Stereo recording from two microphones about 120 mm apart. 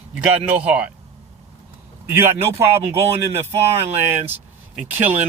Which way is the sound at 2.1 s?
20° right (ahead or behind).